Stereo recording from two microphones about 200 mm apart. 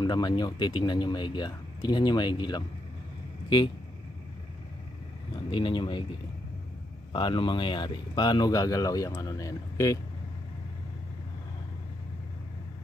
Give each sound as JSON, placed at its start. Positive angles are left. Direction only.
{"t": 0.0, "sound": "speech", "side_deg": 20}
{"t": 5.5, "sound": "speech", "side_deg": 25}
{"t": 7.1, "sound": "speech", "side_deg": 25}